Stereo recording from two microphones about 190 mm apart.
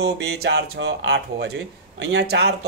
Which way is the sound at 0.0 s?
60° right (ahead or behind).